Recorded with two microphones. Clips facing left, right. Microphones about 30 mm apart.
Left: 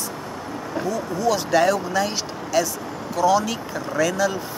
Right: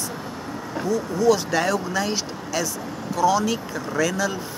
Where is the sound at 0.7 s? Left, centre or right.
Centre.